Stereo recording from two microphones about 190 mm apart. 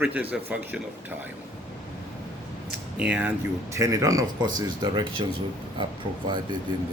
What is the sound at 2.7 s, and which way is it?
A man's voice, 5° right (ahead or behind).